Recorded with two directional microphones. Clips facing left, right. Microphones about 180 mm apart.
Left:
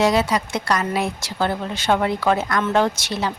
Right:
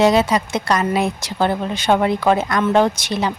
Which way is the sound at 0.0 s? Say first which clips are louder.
Right 4 dB; 20° right (ahead or behind).